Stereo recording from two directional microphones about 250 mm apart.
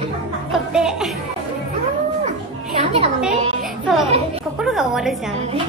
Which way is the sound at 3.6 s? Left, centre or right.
Centre.